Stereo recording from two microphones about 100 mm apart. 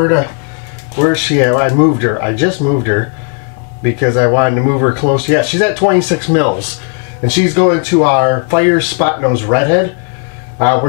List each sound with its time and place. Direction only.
0.0 s speech: 20° left (ahead or behind)